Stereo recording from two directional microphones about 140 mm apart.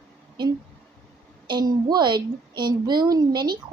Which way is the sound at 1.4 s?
30° right (ahead or behind).